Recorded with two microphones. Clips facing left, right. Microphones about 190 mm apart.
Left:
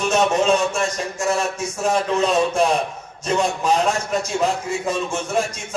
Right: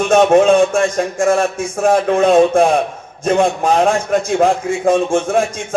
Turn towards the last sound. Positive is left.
turn(degrees=-50)  # may be behind; listen again after turning